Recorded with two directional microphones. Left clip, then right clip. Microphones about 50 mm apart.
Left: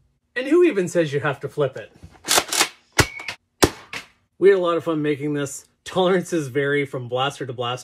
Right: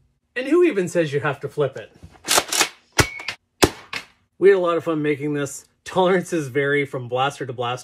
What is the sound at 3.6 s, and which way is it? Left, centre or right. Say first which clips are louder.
Chop: even; left.